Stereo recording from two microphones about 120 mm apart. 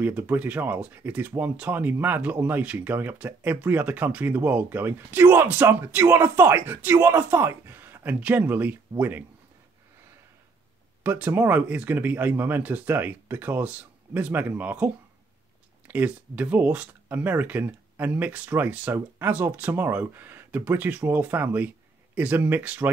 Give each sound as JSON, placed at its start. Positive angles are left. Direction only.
{"t": 0.0, "sound": "speech", "side_deg": -15}
{"t": 11.1, "sound": "speech", "side_deg": -15}
{"t": 15.9, "sound": "speech", "side_deg": -15}